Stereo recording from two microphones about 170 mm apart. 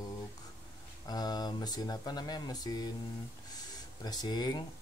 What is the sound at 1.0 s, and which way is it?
Speech, 25° left (ahead or behind).